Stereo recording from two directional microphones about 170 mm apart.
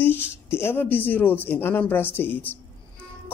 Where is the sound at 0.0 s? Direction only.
15° left (ahead or behind).